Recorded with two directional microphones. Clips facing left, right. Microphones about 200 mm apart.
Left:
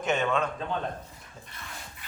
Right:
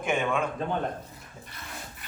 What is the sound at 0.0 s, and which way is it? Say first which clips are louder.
Speech: even; 10° right (ahead or behind).